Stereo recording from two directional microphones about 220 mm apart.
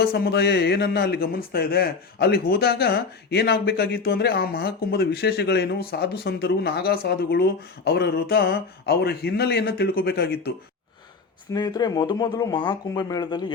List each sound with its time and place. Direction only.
0.0 s a man's voice: 45° left (ahead or behind)
11.5 s speech: 20° left (ahead or behind)